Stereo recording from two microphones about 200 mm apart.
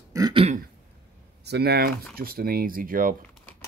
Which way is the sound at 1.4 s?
55° right (ahead or behind).